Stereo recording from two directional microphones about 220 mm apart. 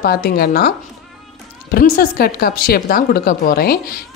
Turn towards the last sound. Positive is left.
turn(degrees=45)  # may be behind; listen again after turning